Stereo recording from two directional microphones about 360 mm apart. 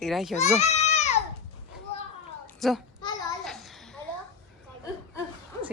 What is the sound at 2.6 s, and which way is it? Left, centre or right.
Speech, centre.